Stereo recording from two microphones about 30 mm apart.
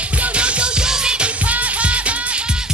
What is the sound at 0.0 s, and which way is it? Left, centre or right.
Music, right.